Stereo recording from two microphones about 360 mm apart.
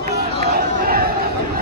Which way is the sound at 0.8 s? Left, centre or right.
Right.